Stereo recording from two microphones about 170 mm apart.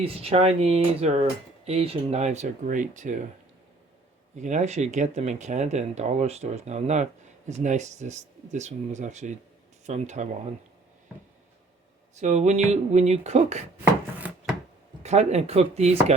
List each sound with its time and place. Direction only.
0.0 s speech: 35° right (ahead or behind)
4.4 s speech: 45° right (ahead or behind)
12.1 s speech: 45° right (ahead or behind)
13.8 s chopping: 10° right (ahead or behind)
15.0 s speech: 40° right (ahead or behind)